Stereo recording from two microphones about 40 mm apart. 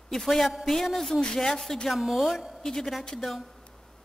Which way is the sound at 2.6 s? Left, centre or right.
Centre.